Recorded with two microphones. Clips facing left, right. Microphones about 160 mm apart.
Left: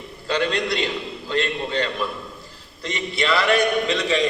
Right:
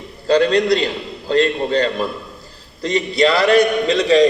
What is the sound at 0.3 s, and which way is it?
A man's voice, 35° right (ahead or behind).